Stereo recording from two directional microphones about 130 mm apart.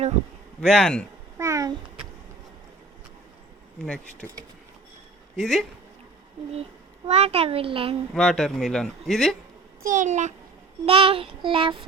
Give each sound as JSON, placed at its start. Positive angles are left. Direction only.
{"t": 0.6, "sound": "speech", "side_deg": 5}
{"t": 1.4, "sound": "a sound", "side_deg": -25}
{"t": 3.8, "sound": "speech", "side_deg": 10}
{"t": 5.4, "sound": "speech", "side_deg": 0}
{"t": 7.1, "sound": "child singing", "side_deg": -50}
{"t": 8.1, "sound": "speech", "side_deg": 5}
{"t": 9.8, "sound": "a child's voice", "side_deg": -85}
{"t": 10.8, "sound": "child singing", "side_deg": -45}